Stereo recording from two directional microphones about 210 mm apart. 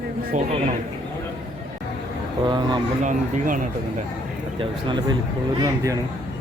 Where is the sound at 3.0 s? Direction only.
40° right (ahead or behind).